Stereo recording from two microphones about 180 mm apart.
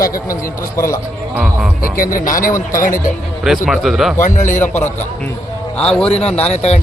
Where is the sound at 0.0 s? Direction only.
50° left (ahead or behind).